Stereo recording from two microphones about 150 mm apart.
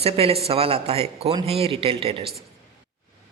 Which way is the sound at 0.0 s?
40° right (ahead or behind).